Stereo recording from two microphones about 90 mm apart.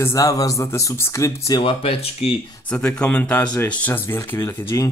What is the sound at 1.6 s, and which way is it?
Speech, 80° left.